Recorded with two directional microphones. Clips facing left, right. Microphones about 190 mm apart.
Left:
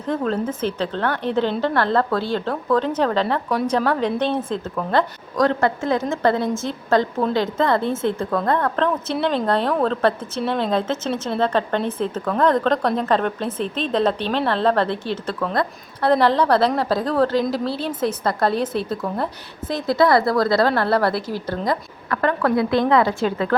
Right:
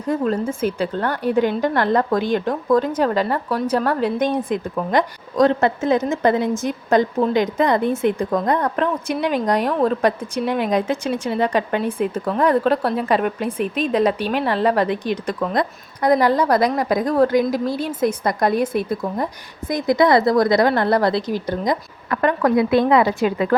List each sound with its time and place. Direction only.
0.0 s a woman's voice: 10° right (ahead or behind)